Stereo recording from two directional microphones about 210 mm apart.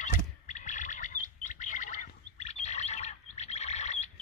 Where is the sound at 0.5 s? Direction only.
35° left (ahead or behind).